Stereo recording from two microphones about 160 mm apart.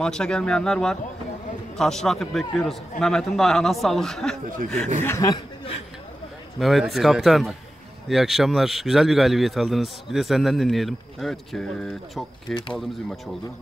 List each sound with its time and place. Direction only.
0.0 s a man's voice: 5° left (ahead or behind)
5.0 s speech: 20° left (ahead or behind)
6.6 s a man's voice: centre (ahead or behind)